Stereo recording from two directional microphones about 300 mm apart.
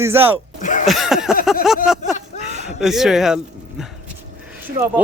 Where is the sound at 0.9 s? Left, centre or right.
Centre.